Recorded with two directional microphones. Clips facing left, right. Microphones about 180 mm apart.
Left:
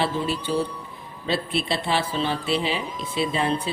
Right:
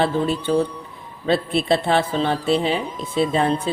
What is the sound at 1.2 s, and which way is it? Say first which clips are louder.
Speech: right 6 dB; 50° right (ahead or behind).